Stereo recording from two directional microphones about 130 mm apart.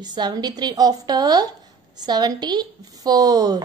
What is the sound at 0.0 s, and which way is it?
A woman's voice, 35° right (ahead or behind).